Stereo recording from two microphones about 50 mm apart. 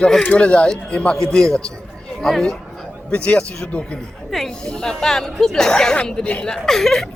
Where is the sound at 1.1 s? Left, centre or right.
Centre.